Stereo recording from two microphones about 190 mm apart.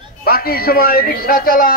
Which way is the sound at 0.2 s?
50° left (ahead or behind).